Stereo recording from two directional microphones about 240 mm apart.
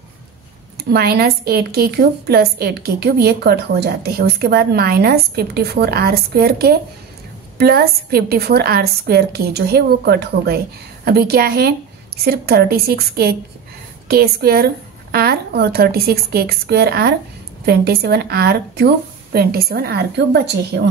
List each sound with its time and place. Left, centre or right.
0.7 s a woman's voice: right